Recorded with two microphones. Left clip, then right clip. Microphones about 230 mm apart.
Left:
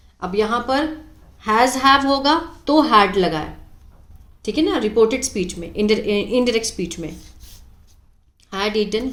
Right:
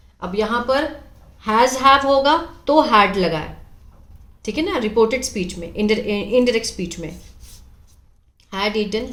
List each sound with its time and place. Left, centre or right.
0.2 s a woman's voice: centre
8.4 s a woman's voice: centre